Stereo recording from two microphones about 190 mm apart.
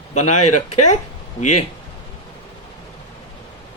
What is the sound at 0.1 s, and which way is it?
Speech, 40° left (ahead or behind).